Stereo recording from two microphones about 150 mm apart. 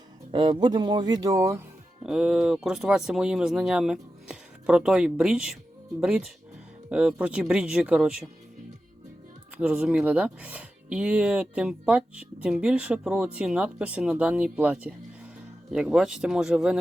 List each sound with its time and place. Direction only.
0.3 s speech: 30° right (ahead or behind)
2.0 s speech: 5° right (ahead or behind)
9.6 s speech: 5° right (ahead or behind)